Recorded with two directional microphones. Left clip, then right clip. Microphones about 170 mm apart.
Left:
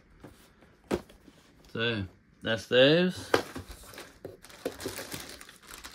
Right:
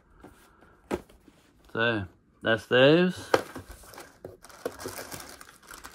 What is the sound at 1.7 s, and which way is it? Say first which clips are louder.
Speech: right 4 dB; 15° right (ahead or behind).